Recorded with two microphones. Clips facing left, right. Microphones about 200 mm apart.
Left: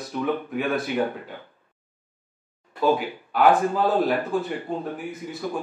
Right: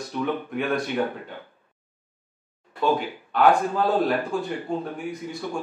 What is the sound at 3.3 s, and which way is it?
Speech, 5° left (ahead or behind).